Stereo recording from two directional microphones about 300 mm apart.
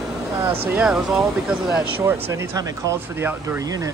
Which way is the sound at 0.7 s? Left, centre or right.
Centre.